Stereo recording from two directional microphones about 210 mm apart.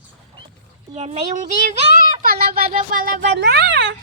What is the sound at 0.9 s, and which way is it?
Speech, 30° right (ahead or behind).